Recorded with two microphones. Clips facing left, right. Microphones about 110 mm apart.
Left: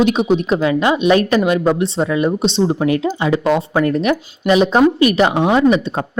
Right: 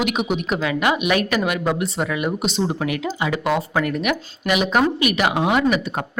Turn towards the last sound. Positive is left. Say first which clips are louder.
# left 6 dB
turn(degrees=25)  # may be behind; listen again after turning